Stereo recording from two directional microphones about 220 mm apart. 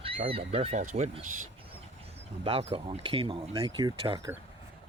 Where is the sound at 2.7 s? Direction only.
25° right (ahead or behind).